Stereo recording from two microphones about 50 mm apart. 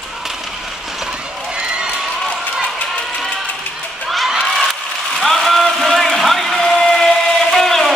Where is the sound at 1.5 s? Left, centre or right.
Centre.